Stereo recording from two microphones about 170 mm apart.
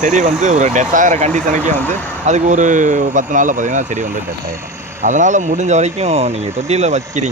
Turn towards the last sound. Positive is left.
turn(degrees=-45)  # may be behind; listen again after turning